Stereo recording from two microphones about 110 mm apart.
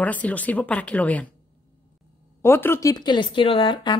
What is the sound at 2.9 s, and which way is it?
A woman's voice, 40° left (ahead or behind).